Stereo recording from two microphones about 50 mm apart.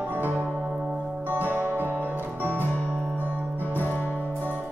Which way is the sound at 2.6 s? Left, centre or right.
Left.